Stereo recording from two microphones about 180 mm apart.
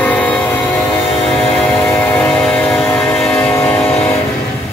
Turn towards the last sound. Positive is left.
turn(degrees=5)  # may be behind; listen again after turning